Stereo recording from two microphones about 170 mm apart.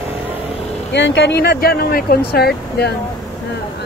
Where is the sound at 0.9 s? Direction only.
90° left; by 2.9 s 65° left (ahead or behind).